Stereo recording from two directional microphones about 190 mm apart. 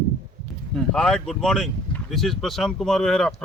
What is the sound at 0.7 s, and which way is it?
Speech, 5° left (ahead or behind).